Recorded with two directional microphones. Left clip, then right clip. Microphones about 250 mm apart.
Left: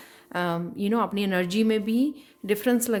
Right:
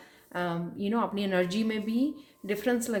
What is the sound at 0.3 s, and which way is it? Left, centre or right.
A woman's voice, left.